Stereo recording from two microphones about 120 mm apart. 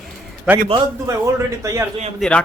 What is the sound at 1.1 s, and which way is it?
Speech, 25° right (ahead or behind).